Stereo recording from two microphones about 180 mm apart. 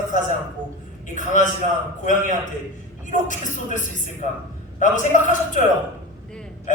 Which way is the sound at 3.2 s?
45° left (ahead or behind).